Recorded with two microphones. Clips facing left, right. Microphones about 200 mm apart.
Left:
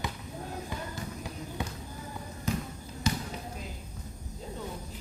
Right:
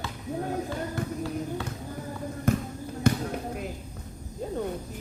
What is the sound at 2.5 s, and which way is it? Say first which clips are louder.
Basketball bounce: right 6 dB; 55° right (ahead or behind).